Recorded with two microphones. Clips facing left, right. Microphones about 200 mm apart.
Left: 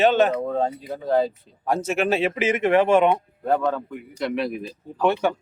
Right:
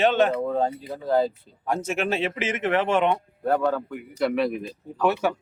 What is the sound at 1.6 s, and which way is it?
Speech, 35° left (ahead or behind).